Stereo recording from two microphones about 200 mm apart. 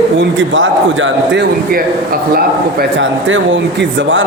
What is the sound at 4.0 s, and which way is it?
Speech, 70° right (ahead or behind).